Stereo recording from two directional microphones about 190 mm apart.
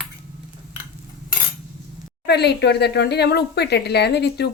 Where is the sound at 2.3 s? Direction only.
60° left (ahead or behind).